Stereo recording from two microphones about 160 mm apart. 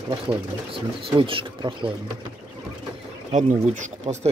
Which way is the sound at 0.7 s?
35° right (ahead or behind).